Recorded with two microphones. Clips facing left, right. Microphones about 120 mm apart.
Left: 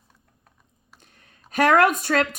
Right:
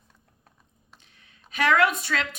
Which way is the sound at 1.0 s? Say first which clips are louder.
Left 3 dB; 45° left (ahead or behind).